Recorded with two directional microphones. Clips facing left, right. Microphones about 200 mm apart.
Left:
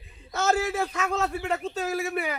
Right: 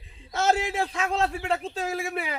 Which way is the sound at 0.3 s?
30° right (ahead or behind).